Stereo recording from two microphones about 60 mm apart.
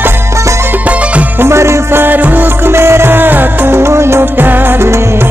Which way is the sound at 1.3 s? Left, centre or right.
Right.